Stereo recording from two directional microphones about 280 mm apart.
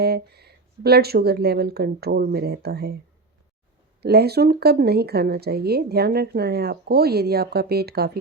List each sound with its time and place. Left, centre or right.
0.0 s speech: right
4.0 s speech: right